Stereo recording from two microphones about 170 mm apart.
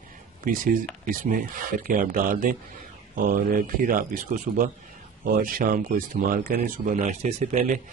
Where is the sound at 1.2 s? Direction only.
55° right (ahead or behind).